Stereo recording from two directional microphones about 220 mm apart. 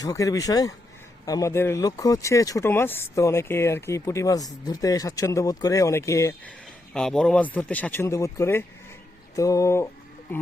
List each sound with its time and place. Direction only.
0.0 s speech: 15° left (ahead or behind)
6.9 s speech: 5° left (ahead or behind)